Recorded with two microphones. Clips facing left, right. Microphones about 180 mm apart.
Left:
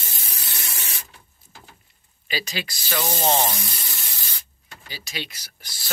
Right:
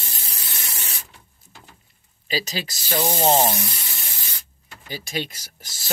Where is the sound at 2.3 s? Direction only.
35° right (ahead or behind).